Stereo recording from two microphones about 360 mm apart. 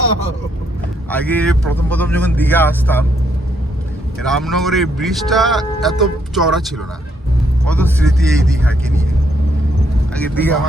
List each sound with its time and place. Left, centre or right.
1.1 s speech: centre
4.2 s speech: centre
10.2 s speech: centre